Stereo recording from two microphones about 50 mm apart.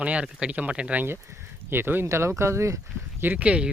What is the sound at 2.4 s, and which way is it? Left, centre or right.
Speech, right.